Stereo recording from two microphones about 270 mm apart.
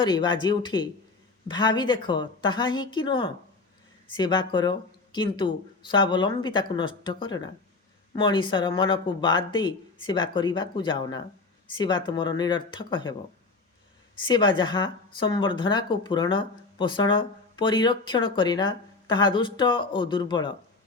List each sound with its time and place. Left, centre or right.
0.0 s speech: centre
14.3 s speech: centre